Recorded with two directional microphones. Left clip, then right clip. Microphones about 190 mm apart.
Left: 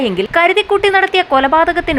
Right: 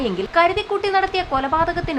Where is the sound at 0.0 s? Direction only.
20° left (ahead or behind).